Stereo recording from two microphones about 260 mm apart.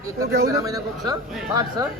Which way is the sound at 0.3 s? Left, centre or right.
Right.